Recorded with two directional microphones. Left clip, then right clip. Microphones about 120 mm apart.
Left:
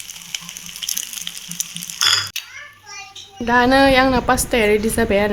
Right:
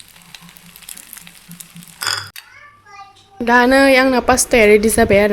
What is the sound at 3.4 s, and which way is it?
A woman's voice, 25° right (ahead or behind).